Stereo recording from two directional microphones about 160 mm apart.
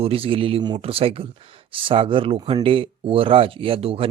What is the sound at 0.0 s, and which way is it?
Speech, 35° right (ahead or behind).